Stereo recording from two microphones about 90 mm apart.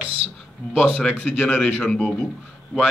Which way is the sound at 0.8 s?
15° left (ahead or behind).